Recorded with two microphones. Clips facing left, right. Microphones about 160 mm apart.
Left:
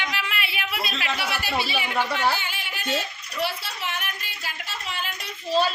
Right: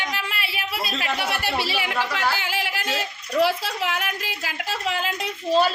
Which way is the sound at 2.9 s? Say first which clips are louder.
Right 4 dB; 90° right.